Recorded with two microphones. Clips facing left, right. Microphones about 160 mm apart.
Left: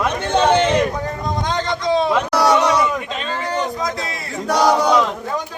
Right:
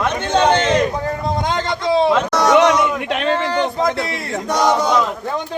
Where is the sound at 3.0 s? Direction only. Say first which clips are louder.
Right 6 dB; 70° right (ahead or behind).